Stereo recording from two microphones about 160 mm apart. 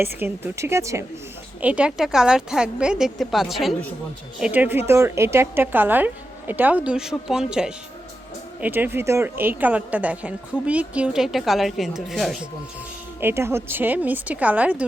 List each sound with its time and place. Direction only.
0.0 s a woman's voice: 15° right (ahead or behind)
13.1 s a woman's voice: 15° right (ahead or behind)